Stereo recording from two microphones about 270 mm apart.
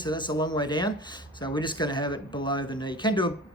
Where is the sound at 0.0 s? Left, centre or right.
Centre.